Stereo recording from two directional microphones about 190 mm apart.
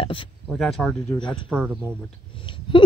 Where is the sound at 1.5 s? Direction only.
Centre (ahead or behind).